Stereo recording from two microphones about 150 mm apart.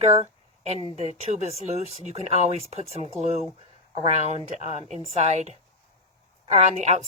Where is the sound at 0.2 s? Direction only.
45° right (ahead or behind).